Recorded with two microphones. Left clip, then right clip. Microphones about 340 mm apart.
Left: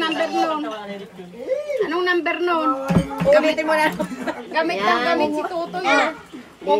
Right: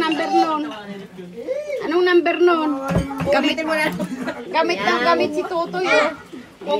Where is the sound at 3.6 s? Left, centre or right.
Centre.